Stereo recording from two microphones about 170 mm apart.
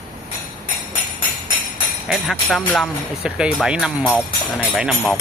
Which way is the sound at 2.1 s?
Centre (ahead or behind).